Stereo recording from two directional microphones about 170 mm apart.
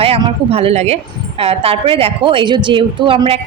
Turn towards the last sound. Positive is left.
turn(degrees=-30)  # may be behind; listen again after turning